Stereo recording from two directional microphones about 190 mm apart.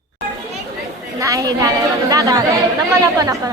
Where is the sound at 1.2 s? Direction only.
15° right (ahead or behind).